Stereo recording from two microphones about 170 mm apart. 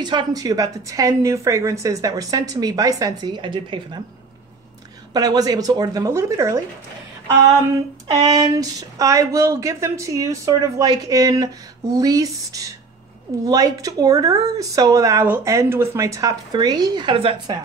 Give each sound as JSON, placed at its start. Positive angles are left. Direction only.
{"t": 0.0, "sound": "speech", "side_deg": -25}
{"t": 5.1, "sound": "speech", "side_deg": -20}
{"t": 8.3, "sound": "speech", "side_deg": -20}